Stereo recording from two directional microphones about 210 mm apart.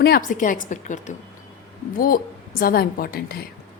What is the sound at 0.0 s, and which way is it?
A woman's voice, 45° left (ahead or behind).